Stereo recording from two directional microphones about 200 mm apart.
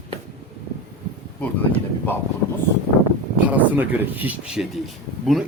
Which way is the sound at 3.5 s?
10° right (ahead or behind).